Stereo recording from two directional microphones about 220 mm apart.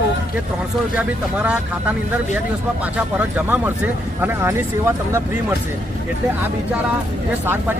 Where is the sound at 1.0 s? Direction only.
5° right (ahead or behind).